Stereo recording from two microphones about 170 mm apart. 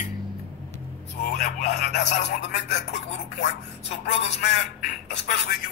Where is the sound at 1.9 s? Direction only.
90° left.